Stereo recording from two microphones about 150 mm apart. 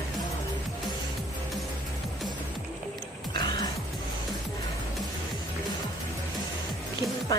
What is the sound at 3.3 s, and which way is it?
Music, 30° left (ahead or behind).